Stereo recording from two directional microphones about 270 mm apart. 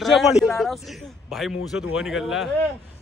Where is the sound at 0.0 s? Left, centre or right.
Centre.